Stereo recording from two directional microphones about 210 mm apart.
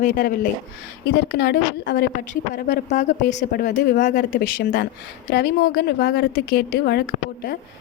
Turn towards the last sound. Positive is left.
turn(degrees=50)  # may be behind; listen again after turning